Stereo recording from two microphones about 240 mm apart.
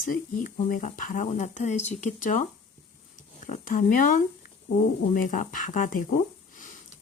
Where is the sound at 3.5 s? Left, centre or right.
Left.